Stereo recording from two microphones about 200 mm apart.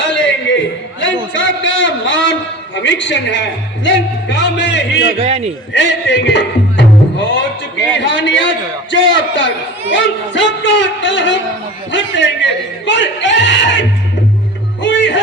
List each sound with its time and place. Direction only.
0.0 s a sound: 65° left (ahead or behind)
2.7 s speech: 65° left (ahead or behind)
5.1 s a man's voice: 30° right (ahead or behind)
5.7 s music: 60° left (ahead or behind)
7.9 s a man's voice: 65° left (ahead or behind)
14.8 s music: 65° left (ahead or behind)